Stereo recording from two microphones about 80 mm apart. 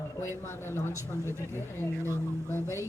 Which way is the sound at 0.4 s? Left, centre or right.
Left.